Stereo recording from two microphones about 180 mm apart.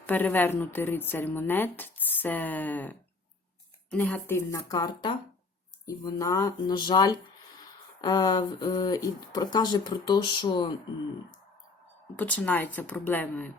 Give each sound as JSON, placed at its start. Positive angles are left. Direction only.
{"t": 0.0, "sound": "speech", "side_deg": 10}
{"t": 12.1, "sound": "speech", "side_deg": 10}